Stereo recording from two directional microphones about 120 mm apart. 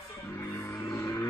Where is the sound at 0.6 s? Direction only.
25° left (ahead or behind).